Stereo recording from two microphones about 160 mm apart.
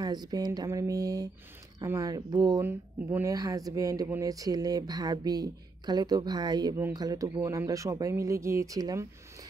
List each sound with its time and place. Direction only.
0.0 s speech: 25° right (ahead or behind)
2.6 s speech: 15° right (ahead or behind)